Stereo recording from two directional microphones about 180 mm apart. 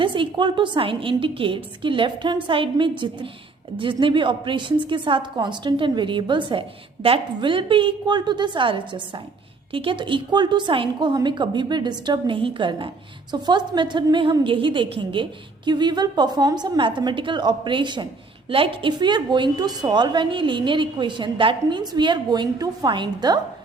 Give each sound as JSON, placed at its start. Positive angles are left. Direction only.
{"t": 0.0, "sound": "a woman's voice", "side_deg": -25}